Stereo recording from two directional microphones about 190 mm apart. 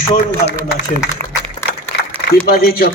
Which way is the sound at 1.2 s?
40° right (ahead or behind).